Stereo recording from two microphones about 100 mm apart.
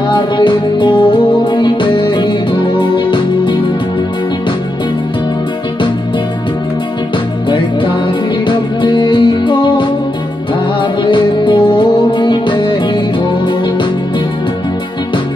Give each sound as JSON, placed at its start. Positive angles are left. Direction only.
{"t": 0.1, "sound": "music", "side_deg": 50}
{"t": 8.5, "sound": "music", "side_deg": 50}